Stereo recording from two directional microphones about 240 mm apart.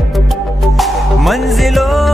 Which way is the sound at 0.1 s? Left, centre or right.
Centre.